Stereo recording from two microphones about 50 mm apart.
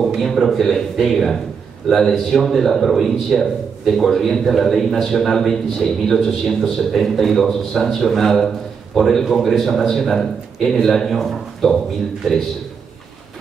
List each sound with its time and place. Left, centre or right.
0.2 s a man's voice: centre